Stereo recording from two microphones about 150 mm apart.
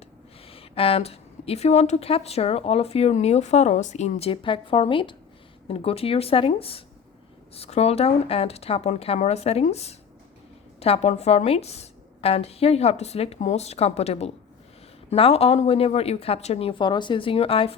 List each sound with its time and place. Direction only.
0.4 s a woman's voice: 40° left (ahead or behind)